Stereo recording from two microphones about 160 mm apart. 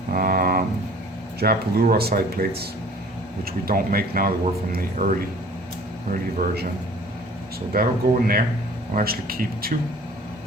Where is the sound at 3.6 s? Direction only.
65° right (ahead or behind).